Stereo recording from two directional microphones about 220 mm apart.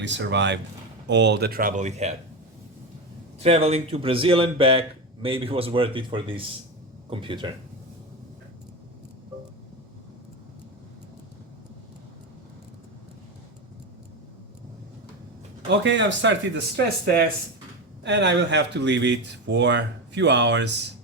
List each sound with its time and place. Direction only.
0.0 s speech: 55° right (ahead or behind); by 2.1 s 30° right (ahead or behind)
3.4 s speech: 30° right (ahead or behind)
15.8 s speech: 55° right (ahead or behind)